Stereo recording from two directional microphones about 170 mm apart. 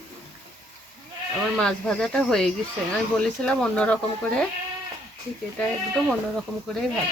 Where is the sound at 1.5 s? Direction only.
5° left (ahead or behind).